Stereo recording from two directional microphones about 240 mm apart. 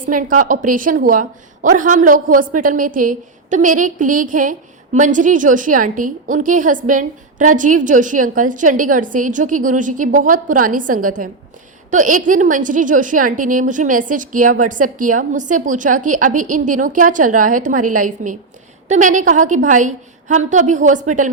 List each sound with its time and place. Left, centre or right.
0.0 s a woman's voice: right